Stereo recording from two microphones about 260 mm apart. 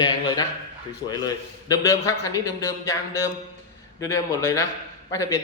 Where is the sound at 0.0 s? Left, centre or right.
Centre.